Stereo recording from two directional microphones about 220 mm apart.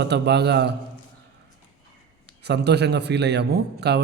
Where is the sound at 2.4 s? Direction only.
50° right (ahead or behind).